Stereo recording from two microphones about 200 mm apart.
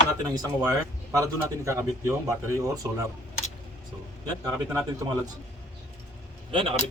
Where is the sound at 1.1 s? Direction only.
15° right (ahead or behind).